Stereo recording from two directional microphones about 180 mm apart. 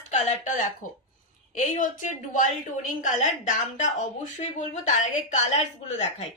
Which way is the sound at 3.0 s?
45° left (ahead or behind).